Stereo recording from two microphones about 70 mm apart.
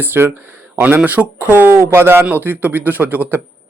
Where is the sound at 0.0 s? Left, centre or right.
Right.